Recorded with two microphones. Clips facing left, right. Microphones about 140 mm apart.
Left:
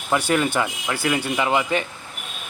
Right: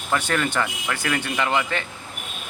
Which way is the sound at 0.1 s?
15° left (ahead or behind).